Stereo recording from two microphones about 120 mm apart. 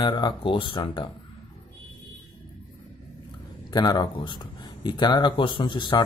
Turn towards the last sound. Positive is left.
turn(degrees=40)  # may be behind; listen again after turning